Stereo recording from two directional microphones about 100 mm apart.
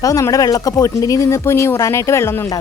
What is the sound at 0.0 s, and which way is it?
Speech, 35° left (ahead or behind).